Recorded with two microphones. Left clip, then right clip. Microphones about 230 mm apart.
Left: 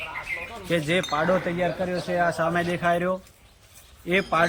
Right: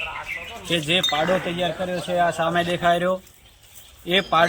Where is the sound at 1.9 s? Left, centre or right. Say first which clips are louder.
Right 3 dB; centre.